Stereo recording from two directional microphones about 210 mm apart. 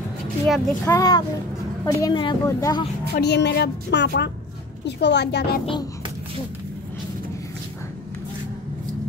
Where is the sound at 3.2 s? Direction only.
55° left (ahead or behind).